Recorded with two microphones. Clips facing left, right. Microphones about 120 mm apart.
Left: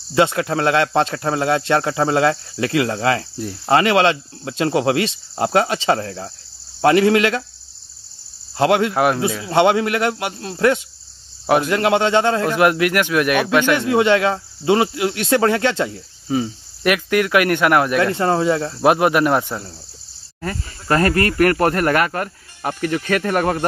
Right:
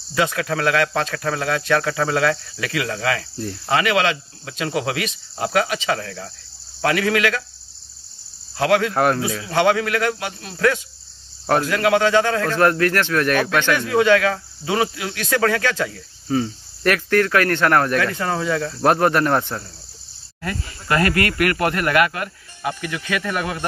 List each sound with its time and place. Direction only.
0.1 s a man's voice: 25° left (ahead or behind)
8.5 s a man's voice: 25° left (ahead or behind)
8.9 s speech: 10° left (ahead or behind)
9.2 s a man's voice: 25° left (ahead or behind)
11.4 s speech: 10° left (ahead or behind)
11.7 s a man's voice: 25° left (ahead or behind)
18.0 s a man's voice: 25° left (ahead or behind)
18.8 s speech: 10° left (ahead or behind)
20.3 s speech: 35° left (ahead or behind)